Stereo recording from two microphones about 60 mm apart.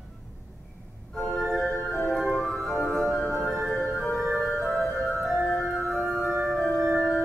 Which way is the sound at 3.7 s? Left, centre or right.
Centre.